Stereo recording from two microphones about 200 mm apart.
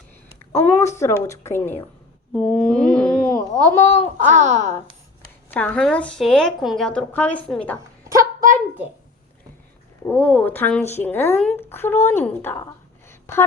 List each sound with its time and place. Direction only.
0.6 s a woman's voice: 15° left (ahead or behind)
4.0 s a child's voice: 35° right (ahead or behind)
5.5 s a woman's voice: 10° left (ahead or behind)
8.1 s a sound: 15° right (ahead or behind)
10.1 s speech: 5° left (ahead or behind)
13.1 s a sound: 10° left (ahead or behind)